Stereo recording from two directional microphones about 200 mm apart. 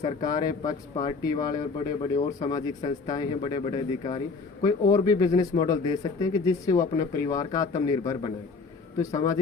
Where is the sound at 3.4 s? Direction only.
25° left (ahead or behind).